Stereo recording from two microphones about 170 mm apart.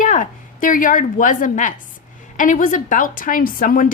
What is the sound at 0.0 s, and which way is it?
A woman's voice, 50° left (ahead or behind).